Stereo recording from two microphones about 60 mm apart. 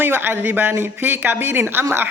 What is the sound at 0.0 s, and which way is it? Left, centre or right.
Speech, right.